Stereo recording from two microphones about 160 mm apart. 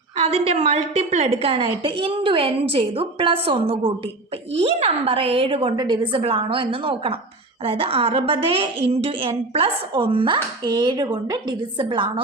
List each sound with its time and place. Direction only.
0.3 s speech: 40° right (ahead or behind)